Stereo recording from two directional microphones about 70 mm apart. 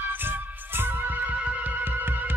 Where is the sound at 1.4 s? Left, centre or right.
Centre.